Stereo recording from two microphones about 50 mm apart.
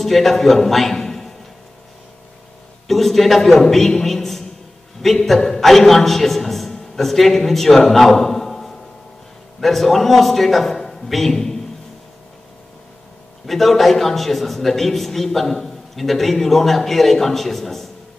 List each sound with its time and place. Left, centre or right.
0.0 s a man's voice: centre
2.9 s a man's voice: centre
13.5 s a man's voice: centre